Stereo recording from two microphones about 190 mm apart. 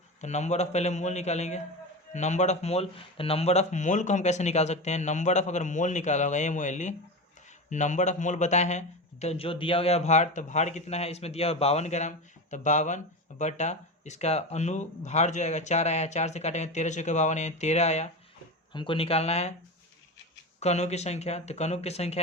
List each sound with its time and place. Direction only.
0.2 s a man's voice: 35° left (ahead or behind)
20.6 s a man's voice: 35° left (ahead or behind)